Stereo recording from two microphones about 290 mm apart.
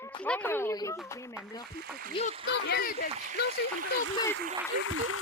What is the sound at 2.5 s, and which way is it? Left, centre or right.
Speech, left.